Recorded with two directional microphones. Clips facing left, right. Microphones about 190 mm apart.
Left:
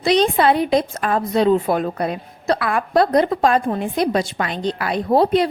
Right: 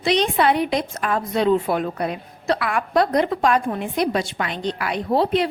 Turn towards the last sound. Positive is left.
turn(degrees=40)  # may be behind; listen again after turning